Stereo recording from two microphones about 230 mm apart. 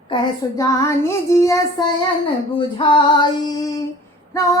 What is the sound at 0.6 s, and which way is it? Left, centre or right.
A woman's voice, centre.